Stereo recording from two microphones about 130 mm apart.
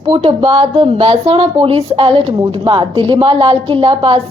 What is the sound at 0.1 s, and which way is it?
A woman's voice, 45° right (ahead or behind).